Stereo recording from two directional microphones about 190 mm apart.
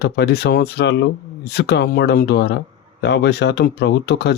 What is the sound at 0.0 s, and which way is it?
Speech, 60° left (ahead or behind).